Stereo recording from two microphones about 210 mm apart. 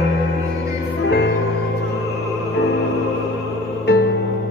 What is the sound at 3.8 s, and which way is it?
Music, 50° left (ahead or behind).